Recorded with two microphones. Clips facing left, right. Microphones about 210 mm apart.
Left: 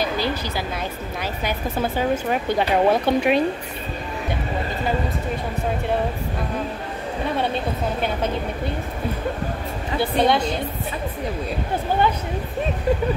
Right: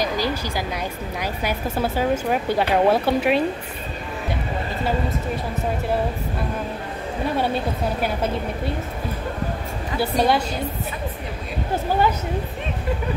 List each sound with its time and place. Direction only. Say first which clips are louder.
0.0 s a sound: even; 10° right (ahead or behind)
1.2 s speech: right 1 dB; 10° right (ahead or behind)
9.9 s a woman's voice: left 1 dB; 5° right (ahead or behind)